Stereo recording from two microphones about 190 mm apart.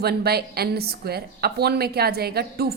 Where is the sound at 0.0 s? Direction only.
55° right (ahead or behind).